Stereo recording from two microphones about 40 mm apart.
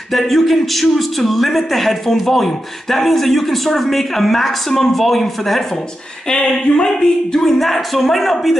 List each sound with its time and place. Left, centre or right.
0.1 s a man's voice: centre
6.2 s speech: left
7.3 s a man's voice: centre